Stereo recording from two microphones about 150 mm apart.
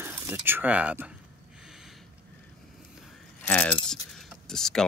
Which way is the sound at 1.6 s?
5° right (ahead or behind).